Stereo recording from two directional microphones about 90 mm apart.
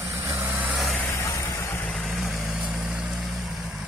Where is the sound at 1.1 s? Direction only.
35° left (ahead or behind).